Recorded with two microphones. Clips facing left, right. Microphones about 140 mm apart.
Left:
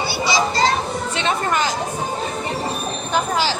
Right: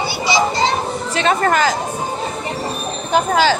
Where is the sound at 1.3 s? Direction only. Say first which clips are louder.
Right 5 dB; 90° right.